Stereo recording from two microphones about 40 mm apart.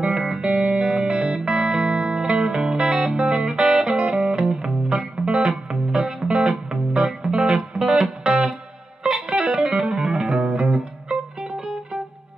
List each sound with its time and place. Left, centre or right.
0.0 s music: centre
3.2 s music: right
3.4 s music: centre
7.7 s music: centre
9.5 s music: centre